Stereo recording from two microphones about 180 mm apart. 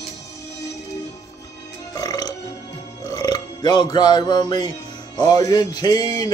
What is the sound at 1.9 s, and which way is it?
Burping, 20° left (ahead or behind).